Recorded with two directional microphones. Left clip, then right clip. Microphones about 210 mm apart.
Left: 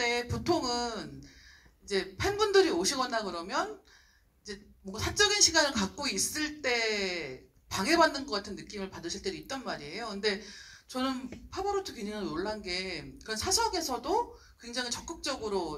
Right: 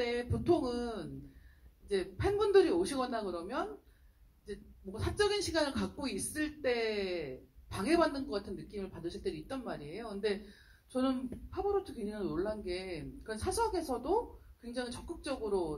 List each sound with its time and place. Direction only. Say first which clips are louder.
0.0 s music: left 4 dB; 50° left (ahead or behind)
1.9 s speech: left 2 dB; 50° left (ahead or behind)
4.9 s speech: left 5 dB; 50° left (ahead or behind)